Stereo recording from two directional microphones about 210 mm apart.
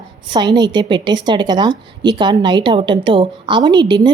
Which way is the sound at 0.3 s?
20° right (ahead or behind).